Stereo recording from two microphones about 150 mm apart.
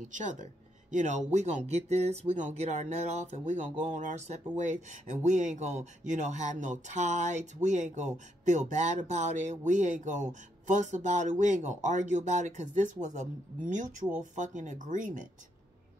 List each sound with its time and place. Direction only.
0.1 s speech: 55° right (ahead or behind)